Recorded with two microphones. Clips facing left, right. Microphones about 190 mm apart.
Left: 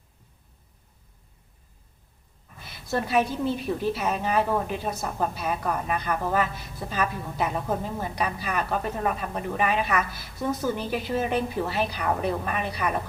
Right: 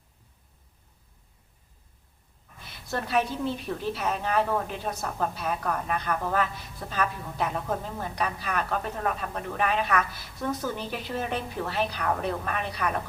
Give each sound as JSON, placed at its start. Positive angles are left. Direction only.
{"t": 2.9, "sound": "a woman's voice", "side_deg": 5}